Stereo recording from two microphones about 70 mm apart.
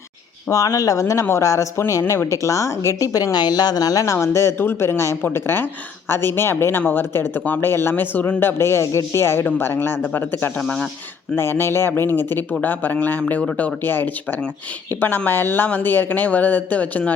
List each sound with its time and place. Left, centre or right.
0.5 s a woman's voice: left
3.3 s speech: left
4.0 s speech: left; by 10.8 s centre
11.3 s speech: left